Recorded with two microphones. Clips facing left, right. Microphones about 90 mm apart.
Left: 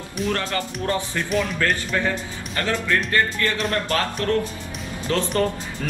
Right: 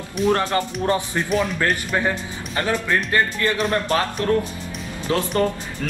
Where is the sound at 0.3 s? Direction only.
25° right (ahead or behind).